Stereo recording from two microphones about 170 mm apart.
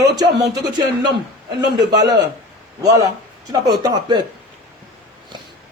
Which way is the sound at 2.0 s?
20° right (ahead or behind).